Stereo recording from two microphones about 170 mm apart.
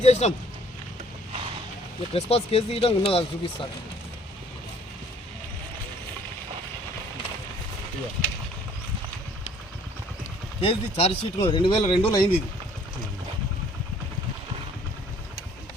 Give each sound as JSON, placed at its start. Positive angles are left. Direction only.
{"t": 0.0, "sound": "speech", "side_deg": 40}
{"t": 2.1, "sound": "speech", "side_deg": 35}
{"t": 10.6, "sound": "speech", "side_deg": 35}